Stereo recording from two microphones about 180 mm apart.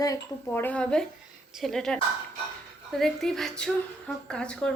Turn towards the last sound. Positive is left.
turn(degrees=5)  # may be behind; listen again after turning